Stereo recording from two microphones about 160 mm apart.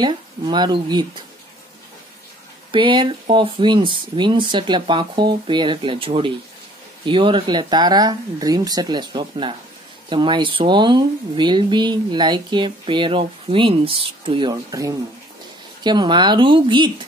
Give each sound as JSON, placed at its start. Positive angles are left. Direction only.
{"t": 0.0, "sound": "speech", "side_deg": -25}
{"t": 2.7, "sound": "speech", "side_deg": -30}